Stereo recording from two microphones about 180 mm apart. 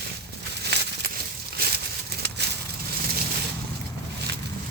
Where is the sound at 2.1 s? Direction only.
65° right (ahead or behind).